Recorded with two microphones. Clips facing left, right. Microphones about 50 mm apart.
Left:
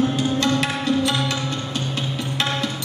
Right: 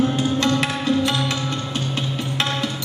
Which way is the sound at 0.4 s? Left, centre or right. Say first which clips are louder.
Right 1 dB; right.